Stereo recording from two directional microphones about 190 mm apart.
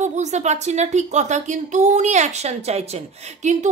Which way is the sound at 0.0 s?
35° right (ahead or behind).